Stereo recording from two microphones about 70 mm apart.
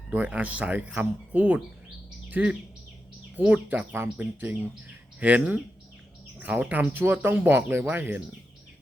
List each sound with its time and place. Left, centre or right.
0.1 s speech: centre
5.2 s speech: centre